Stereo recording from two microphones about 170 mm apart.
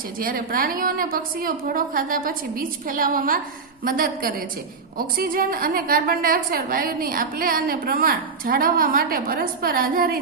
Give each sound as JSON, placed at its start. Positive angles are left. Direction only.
{"t": 0.2, "sound": "a woman's voice", "side_deg": -60}